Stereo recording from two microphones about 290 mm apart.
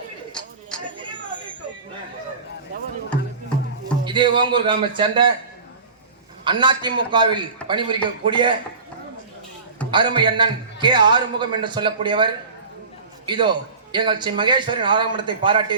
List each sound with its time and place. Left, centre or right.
0.7 s a sound: centre
4.0 s a man's voice: centre
6.4 s a man's voice: centre
9.9 s a man's voice: centre